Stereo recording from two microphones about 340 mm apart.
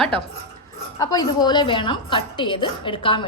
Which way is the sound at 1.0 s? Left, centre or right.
Centre.